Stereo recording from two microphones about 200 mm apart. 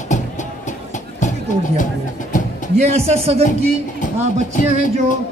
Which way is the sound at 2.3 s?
40° left (ahead or behind).